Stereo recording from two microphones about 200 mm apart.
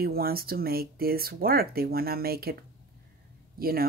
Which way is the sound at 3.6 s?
50° right (ahead or behind).